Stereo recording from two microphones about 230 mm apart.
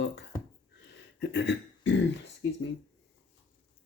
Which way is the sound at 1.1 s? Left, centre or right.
Left.